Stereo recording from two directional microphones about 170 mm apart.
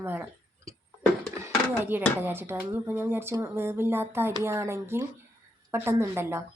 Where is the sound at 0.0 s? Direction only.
10° right (ahead or behind).